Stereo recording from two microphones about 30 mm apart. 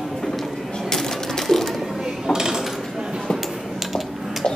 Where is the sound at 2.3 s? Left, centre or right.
Centre.